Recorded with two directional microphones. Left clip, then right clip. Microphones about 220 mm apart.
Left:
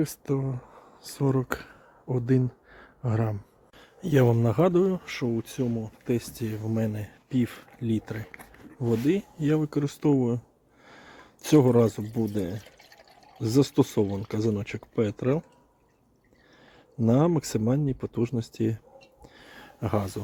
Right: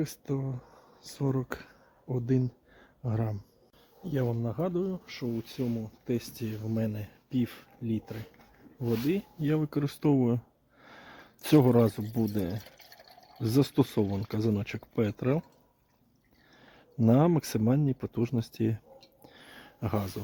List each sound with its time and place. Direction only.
0.0 s speech: 10° left (ahead or behind)
4.1 s speech: 45° left (ahead or behind)
5.3 s speech: 15° left (ahead or behind); by 15.4 s 5° right (ahead or behind)
17.0 s speech: 5° right (ahead or behind)
19.2 s a sound: 5° right (ahead or behind)